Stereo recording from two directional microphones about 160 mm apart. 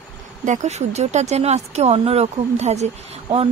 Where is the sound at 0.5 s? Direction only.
45° right (ahead or behind).